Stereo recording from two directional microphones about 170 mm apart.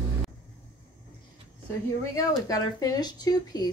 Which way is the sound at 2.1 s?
20° left (ahead or behind).